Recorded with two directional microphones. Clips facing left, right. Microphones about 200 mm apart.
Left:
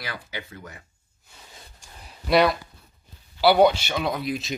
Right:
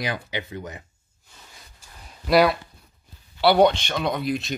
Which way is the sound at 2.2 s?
Centre (ahead or behind).